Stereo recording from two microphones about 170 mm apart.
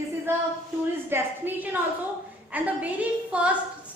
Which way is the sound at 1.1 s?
10° right (ahead or behind).